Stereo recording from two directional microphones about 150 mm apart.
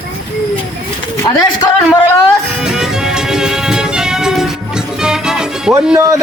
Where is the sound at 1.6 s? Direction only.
20° left (ahead or behind).